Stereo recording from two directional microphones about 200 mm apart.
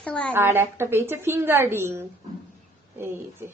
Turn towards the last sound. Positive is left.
turn(degrees=-10)  # may be behind; listen again after turning